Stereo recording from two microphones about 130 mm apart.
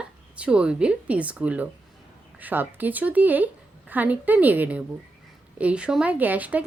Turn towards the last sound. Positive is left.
turn(degrees=-10)  # may be behind; listen again after turning